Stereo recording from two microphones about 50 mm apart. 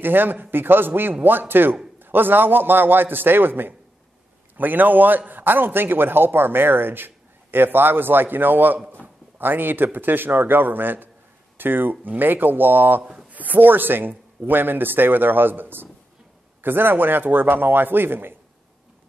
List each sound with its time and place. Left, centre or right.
0.0 s speech: right
9.0 s a sound: right
9.9 s speech: right